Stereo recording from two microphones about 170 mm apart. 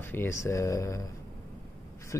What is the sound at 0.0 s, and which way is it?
Speech, 15° left (ahead or behind).